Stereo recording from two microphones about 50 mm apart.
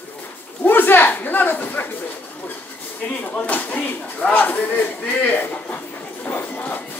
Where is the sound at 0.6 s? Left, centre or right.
Left.